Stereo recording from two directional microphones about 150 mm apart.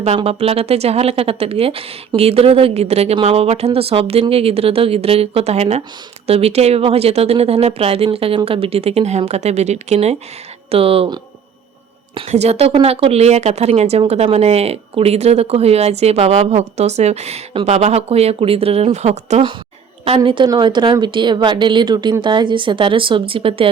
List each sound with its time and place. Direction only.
0.2 s speech: 40° right (ahead or behind)
20.1 s speech: 35° right (ahead or behind)